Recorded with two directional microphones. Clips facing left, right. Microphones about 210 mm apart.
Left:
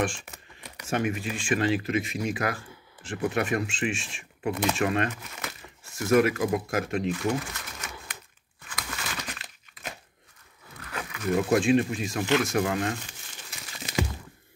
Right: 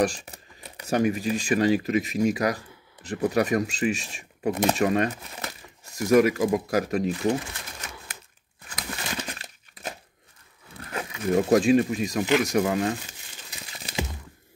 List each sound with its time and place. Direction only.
0.0 s speech: 35° right (ahead or behind)
8.6 s crumpling: 30° right (ahead or behind)
10.8 s wild animals: 25° right (ahead or behind)
11.5 s speech: 40° right (ahead or behind)
13.9 s a sound: 35° right (ahead or behind)